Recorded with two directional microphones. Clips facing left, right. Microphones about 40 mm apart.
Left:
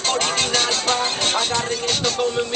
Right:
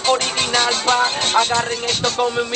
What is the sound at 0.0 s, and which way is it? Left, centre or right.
Music, centre.